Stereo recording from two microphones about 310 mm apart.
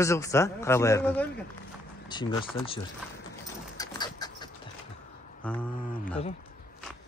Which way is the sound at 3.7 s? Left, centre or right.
Centre.